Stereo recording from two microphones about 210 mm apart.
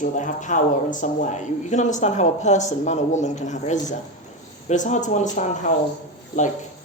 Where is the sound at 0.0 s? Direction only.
35° left (ahead or behind).